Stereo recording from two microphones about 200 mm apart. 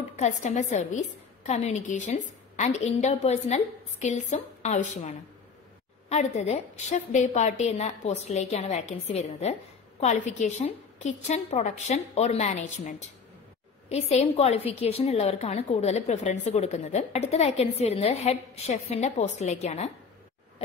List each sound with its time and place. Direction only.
0.1 s a woman's voice: 35° left (ahead or behind)